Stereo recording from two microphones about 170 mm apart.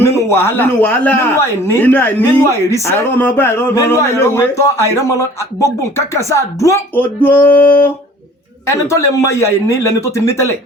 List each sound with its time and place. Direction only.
0.0 s a man's voice: 15° left (ahead or behind)
6.1 s a man's voice: 15° left (ahead or behind)
8.6 s a man's voice: 15° left (ahead or behind)